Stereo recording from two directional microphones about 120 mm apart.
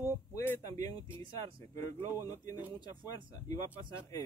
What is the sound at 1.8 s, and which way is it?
Speech, 25° left (ahead or behind).